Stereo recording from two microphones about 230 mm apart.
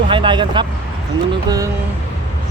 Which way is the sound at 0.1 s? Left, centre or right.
Right.